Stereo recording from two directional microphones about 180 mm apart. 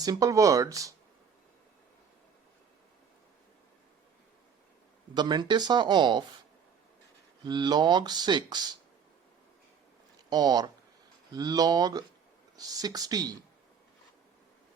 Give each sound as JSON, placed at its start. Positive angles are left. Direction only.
{"t": 0.0, "sound": "speech", "side_deg": -20}
{"t": 5.1, "sound": "speech", "side_deg": -25}
{"t": 7.4, "sound": "speech", "side_deg": -25}
{"t": 10.2, "sound": "speech", "side_deg": -20}